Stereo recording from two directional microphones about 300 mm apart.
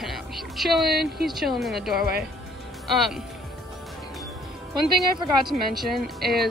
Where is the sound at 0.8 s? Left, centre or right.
Right.